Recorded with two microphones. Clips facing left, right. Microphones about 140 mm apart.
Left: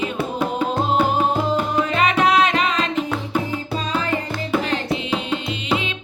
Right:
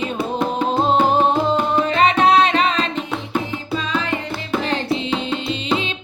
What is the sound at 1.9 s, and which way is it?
Music, 30° right (ahead or behind).